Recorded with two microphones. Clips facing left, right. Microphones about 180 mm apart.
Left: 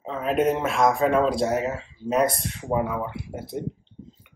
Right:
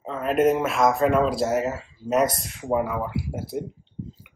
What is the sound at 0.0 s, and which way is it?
Speech, centre (ahead or behind).